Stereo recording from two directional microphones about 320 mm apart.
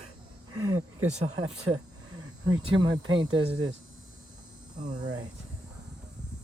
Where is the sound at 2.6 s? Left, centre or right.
Centre.